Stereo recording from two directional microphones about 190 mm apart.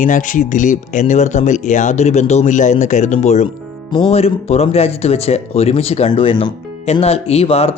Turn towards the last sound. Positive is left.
turn(degrees=30)  # may be behind; listen again after turning